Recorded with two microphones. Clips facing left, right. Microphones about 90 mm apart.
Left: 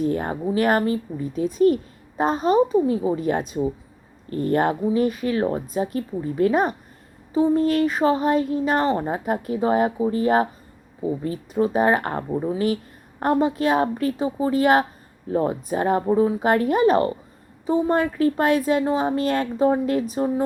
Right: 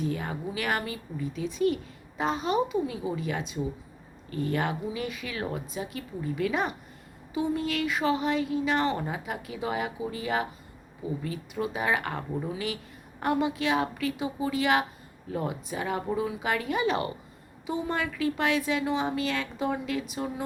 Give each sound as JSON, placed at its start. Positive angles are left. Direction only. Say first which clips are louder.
{"t": 0.0, "sound": "a woman's voice", "louder": "left 8 dB", "side_deg": 45}